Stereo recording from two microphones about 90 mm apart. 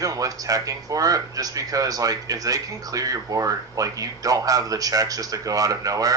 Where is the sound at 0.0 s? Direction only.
40° right (ahead or behind).